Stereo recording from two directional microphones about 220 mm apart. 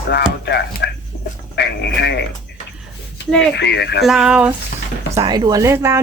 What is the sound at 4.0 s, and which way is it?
Speech, centre (ahead or behind).